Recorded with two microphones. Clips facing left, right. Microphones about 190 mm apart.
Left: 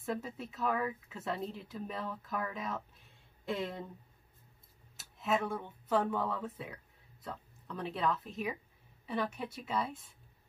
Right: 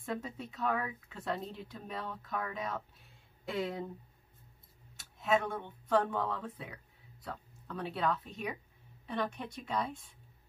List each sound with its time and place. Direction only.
0.0 s speech: centre (ahead or behind)
4.9 s speech: centre (ahead or behind)